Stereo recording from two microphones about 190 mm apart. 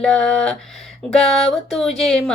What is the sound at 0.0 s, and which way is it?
Speech, 5° left (ahead or behind).